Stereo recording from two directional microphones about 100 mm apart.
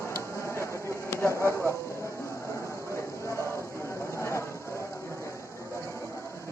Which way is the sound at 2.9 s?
30° left (ahead or behind).